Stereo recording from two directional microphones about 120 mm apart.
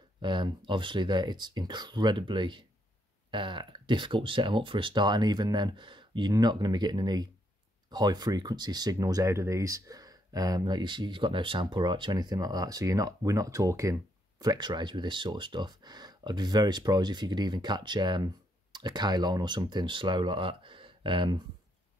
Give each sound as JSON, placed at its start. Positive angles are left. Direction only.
{"t": 0.2, "sound": "speech", "side_deg": -40}